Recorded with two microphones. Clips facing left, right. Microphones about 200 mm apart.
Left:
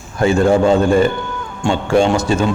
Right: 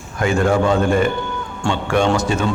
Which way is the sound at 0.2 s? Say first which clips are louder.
Left 4 dB; 25° left (ahead or behind).